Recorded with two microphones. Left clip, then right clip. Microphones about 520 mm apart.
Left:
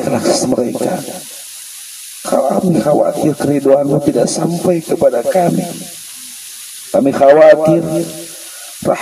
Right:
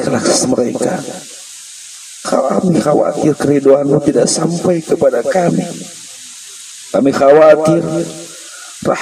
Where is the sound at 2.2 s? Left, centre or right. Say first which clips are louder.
Even; left.